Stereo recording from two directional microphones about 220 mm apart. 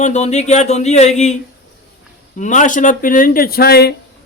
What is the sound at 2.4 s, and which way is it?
Speech, 35° left (ahead or behind).